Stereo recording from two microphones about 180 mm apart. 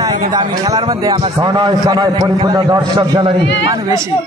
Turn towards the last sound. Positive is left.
turn(degrees=-20)  # may be behind; listen again after turning